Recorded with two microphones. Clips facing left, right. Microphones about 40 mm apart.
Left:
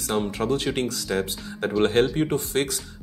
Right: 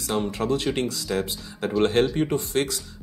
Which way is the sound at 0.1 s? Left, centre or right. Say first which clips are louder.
Even; centre.